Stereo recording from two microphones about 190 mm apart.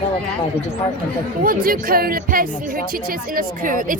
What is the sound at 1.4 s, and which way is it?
Speech, 50° right (ahead or behind).